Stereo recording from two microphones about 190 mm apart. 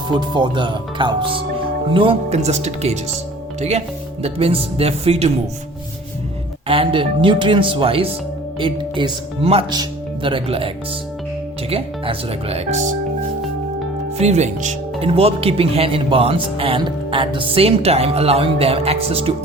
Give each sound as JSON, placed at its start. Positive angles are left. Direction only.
{"t": 0.1, "sound": "speech", "side_deg": -25}
{"t": 6.7, "sound": "speech", "side_deg": -30}
{"t": 11.7, "sound": "speech", "side_deg": -30}
{"t": 14.2, "sound": "speech", "side_deg": -35}